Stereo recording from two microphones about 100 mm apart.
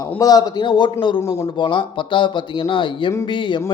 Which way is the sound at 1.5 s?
55° left (ahead or behind).